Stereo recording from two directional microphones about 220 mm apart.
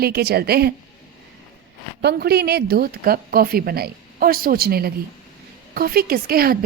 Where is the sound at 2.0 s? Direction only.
45° right (ahead or behind).